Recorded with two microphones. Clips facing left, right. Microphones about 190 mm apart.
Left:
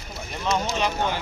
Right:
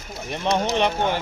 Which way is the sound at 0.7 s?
60° right (ahead or behind).